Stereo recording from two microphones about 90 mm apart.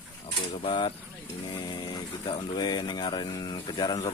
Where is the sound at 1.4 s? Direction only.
60° left (ahead or behind).